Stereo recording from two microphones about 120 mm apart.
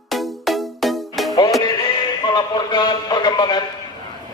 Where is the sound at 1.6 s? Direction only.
40° left (ahead or behind).